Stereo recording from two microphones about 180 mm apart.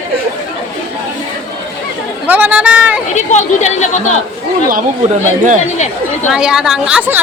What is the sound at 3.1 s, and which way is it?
Speech, 40° left (ahead or behind).